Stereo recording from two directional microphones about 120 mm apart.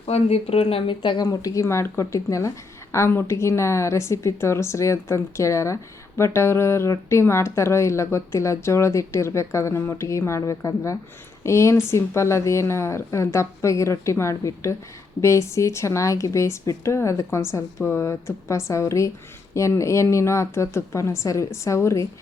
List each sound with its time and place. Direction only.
0.0 s speech: 60° left (ahead or behind); by 1.3 s 40° left (ahead or behind)
1.3 s speech: 30° left (ahead or behind)